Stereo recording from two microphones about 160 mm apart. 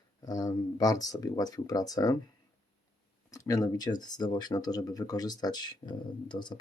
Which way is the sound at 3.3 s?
20° left (ahead or behind).